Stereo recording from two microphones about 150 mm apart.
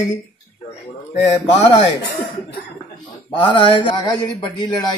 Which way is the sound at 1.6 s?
40° left (ahead or behind).